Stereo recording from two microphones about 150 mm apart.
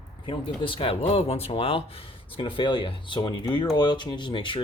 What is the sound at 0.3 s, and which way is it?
Speech, 35° left (ahead or behind).